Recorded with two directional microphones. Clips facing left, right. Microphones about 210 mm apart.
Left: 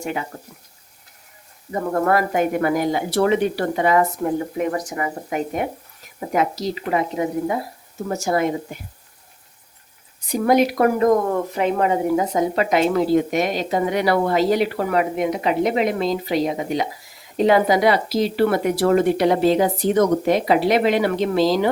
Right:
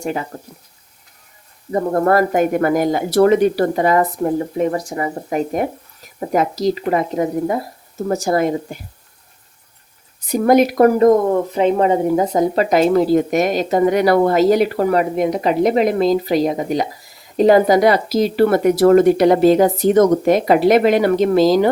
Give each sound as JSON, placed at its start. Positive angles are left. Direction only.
{"t": 0.0, "sound": "speech", "side_deg": -40}
{"t": 1.7, "sound": "speech", "side_deg": -40}
{"t": 10.3, "sound": "speech", "side_deg": -45}
{"t": 11.3, "sound": "speech", "side_deg": -25}